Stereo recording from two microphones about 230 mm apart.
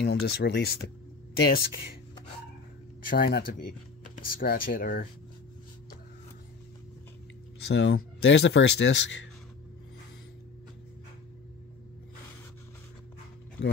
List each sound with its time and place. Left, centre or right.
0.0 s speech: left
3.1 s speech: left
7.6 s speech: left